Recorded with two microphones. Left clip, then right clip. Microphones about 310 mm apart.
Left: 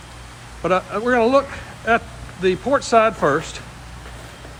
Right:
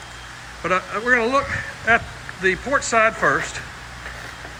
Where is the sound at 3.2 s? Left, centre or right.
Centre.